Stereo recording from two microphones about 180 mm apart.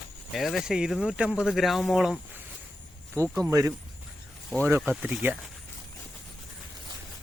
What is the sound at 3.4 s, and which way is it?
Speech, 15° right (ahead or behind).